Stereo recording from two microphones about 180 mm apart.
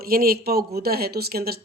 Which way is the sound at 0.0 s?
55° right (ahead or behind).